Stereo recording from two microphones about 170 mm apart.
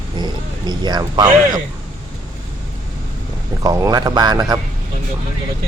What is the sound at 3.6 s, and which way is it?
Speech, 20° right (ahead or behind).